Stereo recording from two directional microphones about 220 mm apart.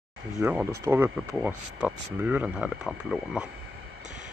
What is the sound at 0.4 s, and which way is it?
Speech, 10° right (ahead or behind).